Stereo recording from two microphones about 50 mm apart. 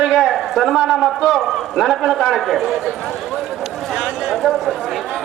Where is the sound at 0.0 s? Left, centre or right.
Centre.